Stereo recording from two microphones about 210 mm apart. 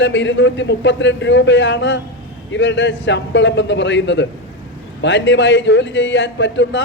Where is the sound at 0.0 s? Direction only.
60° left (ahead or behind).